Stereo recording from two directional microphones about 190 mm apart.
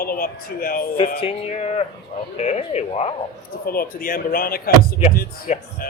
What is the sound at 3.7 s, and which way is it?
A man's voice, 50° left (ahead or behind).